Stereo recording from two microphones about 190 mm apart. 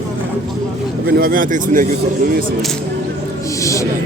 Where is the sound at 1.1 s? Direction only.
50° right (ahead or behind).